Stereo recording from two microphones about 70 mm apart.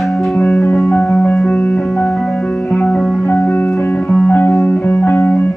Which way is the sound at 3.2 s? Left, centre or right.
Left.